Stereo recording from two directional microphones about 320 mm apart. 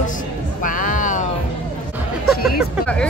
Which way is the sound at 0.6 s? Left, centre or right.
Left.